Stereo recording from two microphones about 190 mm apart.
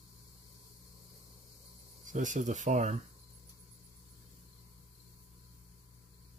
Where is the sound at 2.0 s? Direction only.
40° right (ahead or behind).